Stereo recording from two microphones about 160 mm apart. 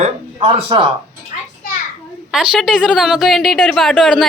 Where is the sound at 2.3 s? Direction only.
Centre (ahead or behind).